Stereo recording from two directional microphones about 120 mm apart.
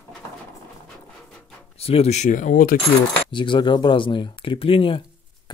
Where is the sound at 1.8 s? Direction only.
55° left (ahead or behind); by 2.5 s 90° left.